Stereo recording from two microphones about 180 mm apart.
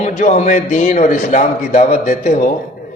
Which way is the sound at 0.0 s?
40° left (ahead or behind).